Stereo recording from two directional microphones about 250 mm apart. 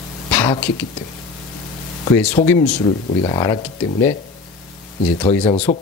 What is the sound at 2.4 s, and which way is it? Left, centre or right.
Speech, left.